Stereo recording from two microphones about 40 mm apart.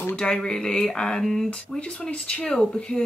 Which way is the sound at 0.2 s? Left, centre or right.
Centre.